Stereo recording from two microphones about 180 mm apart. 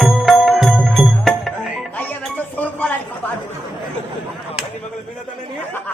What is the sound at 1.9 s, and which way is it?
Chink, 10° left (ahead or behind).